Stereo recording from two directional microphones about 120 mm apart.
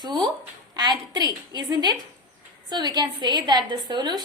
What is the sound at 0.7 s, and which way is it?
Speech, 35° right (ahead or behind).